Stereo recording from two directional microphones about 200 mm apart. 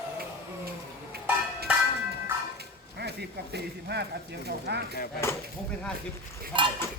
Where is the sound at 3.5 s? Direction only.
55° right (ahead or behind).